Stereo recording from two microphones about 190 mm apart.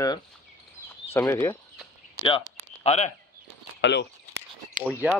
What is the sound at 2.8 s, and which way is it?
Speech, 35° left (ahead or behind).